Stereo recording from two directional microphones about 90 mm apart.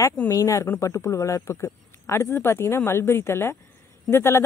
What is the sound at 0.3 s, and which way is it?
A man's voice, 40° left (ahead or behind).